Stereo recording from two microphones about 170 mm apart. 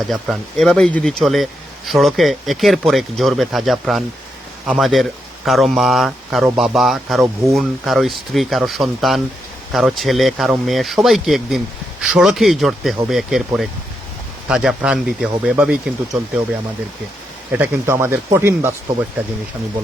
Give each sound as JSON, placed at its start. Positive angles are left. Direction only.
{"t": 0.1, "sound": "speech", "side_deg": 0}
{"t": 17.5, "sound": "speech", "side_deg": -10}